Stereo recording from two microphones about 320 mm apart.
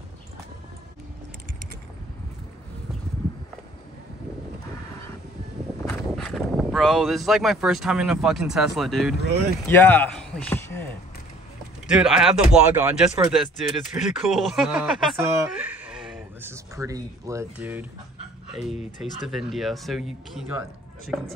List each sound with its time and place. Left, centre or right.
5.9 s speech: centre
11.9 s speech: centre
18.8 s speech: left
19.2 s speech: centre